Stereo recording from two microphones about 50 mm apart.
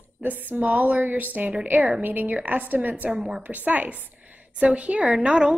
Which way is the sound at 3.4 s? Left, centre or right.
Right.